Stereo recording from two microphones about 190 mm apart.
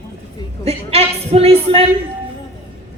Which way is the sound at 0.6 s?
30° right (ahead or behind).